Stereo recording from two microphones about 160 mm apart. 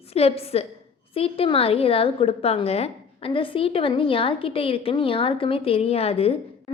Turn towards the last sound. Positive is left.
turn(degrees=40)  # may be behind; listen again after turning